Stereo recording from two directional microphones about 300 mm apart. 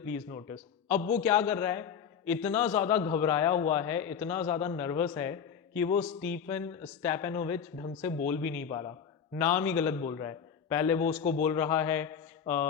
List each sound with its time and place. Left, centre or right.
0.1 s a man's voice: centre
1.2 s a man's voice: centre
11.2 s a man's voice: left
11.4 s speech: centre